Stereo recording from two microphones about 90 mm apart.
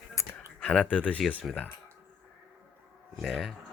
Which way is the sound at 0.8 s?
15° left (ahead or behind).